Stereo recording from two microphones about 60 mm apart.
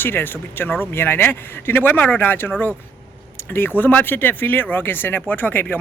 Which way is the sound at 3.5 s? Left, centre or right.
Left.